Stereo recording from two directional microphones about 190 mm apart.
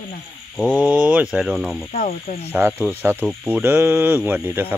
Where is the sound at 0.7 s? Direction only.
5° right (ahead or behind).